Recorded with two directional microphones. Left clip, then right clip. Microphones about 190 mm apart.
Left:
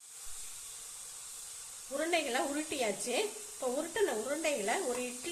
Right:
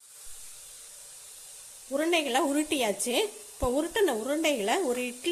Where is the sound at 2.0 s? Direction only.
35° right (ahead or behind).